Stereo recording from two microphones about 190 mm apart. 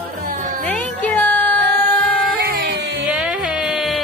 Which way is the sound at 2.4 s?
55° right (ahead or behind).